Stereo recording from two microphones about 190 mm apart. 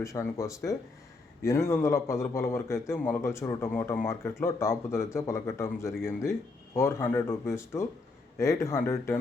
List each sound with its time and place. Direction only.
0.0 s a man's voice: 15° left (ahead or behind)